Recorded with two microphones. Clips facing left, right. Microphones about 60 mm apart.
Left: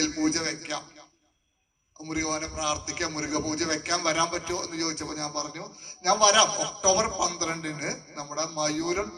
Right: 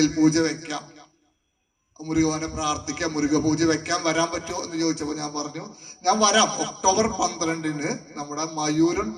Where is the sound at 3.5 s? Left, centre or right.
Right.